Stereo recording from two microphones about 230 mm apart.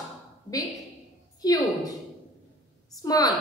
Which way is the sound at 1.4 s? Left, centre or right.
Centre.